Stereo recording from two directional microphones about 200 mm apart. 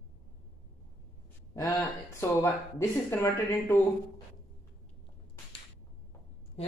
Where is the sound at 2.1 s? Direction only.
15° left (ahead or behind).